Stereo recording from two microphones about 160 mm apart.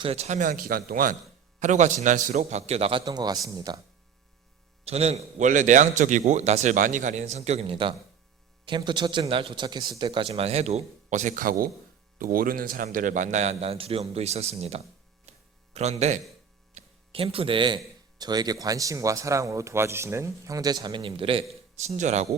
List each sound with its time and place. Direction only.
0.0 s speech: 40° right (ahead or behind); by 1.1 s 60° right (ahead or behind)
1.5 s a man's voice: 50° right (ahead or behind)
3.0 s speech: 25° right (ahead or behind)
4.9 s a man's voice: 40° right (ahead or behind)
15.3 s a sound: 45° right (ahead or behind)
18.2 s speech: 25° right (ahead or behind)
21.8 s a man's voice: 45° right (ahead or behind)